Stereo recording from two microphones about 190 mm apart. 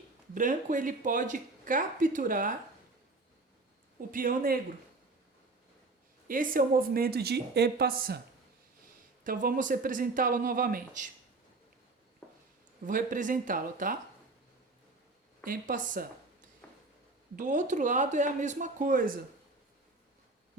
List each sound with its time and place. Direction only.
0.3 s speech: 45° right (ahead or behind)
4.1 s speech: 45° right (ahead or behind)
6.2 s speech: 45° right (ahead or behind)
9.2 s speech: 50° right (ahead or behind)
12.8 s speech: 45° right (ahead or behind)
15.4 s speech: 45° right (ahead or behind)
16.6 s a sound: 10° left (ahead or behind)
17.3 s speech: 40° right (ahead or behind)